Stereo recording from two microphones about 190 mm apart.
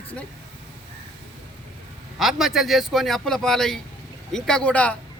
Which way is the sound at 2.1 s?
Centre (ahead or behind).